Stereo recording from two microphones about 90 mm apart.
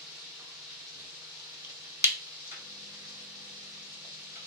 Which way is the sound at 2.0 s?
30° right (ahead or behind).